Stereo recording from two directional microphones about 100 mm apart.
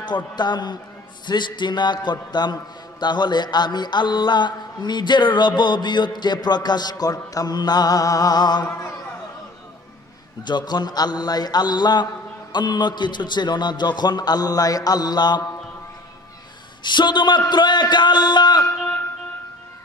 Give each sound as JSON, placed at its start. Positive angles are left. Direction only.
{"t": 0.0, "sound": "a man's voice", "side_deg": 45}
{"t": 8.6, "sound": "speech", "side_deg": 25}
{"t": 10.4, "sound": "a man's voice", "side_deg": 45}
{"t": 16.8, "sound": "a man's voice", "side_deg": 50}